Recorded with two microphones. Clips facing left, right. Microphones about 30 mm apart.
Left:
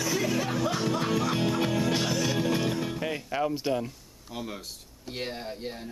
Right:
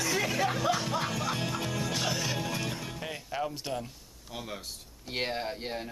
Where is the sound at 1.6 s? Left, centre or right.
Centre.